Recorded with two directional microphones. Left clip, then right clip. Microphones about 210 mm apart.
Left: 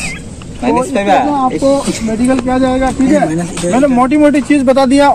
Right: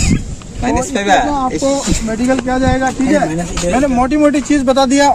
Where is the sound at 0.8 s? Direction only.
55° right (ahead or behind).